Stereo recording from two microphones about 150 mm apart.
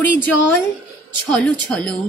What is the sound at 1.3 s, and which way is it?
Mantra, 5° left (ahead or behind).